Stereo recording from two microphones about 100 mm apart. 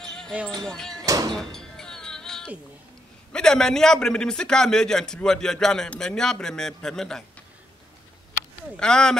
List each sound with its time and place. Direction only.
0.0 s music: 5° left (ahead or behind)
0.7 s speech: 5° left (ahead or behind)
1.0 s music: 35° right (ahead or behind)
1.3 s music: 5° left (ahead or behind)
3.3 s a man's voice: 5° left (ahead or behind)
8.7 s a man's voice: 10° left (ahead or behind)